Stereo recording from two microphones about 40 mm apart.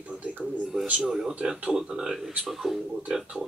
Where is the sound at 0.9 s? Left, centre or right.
Centre.